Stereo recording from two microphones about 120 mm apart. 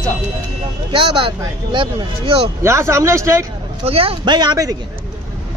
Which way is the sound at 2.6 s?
25° right (ahead or behind).